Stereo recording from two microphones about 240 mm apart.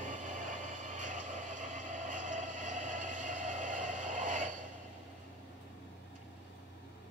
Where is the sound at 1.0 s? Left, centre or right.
Right.